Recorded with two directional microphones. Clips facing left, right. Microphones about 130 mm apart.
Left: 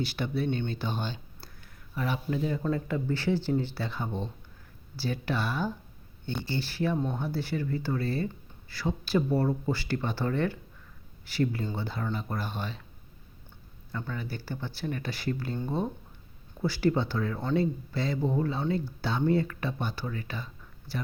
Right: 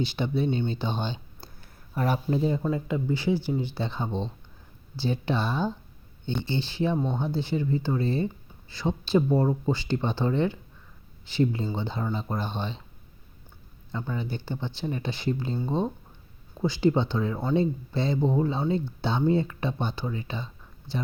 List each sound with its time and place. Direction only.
0.2 s speech: 20° right (ahead or behind)
2.0 s speech: 40° right (ahead or behind)
2.6 s speech: 15° right (ahead or behind)
13.9 s speech: 20° right (ahead or behind)
16.6 s speech: 20° right (ahead or behind)